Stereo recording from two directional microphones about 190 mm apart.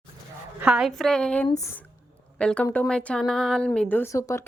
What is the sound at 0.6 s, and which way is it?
Speech, 5° right (ahead or behind).